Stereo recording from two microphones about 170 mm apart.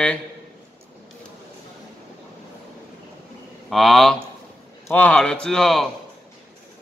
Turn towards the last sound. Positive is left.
turn(degrees=0)  # may be behind; listen again after turning